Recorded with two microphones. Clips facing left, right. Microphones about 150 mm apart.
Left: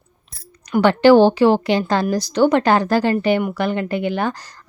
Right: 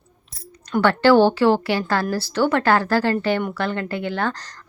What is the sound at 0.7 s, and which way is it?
A woman's voice, 15° left (ahead or behind).